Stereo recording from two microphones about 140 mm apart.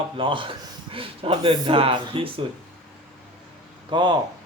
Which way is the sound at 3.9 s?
35° right (ahead or behind).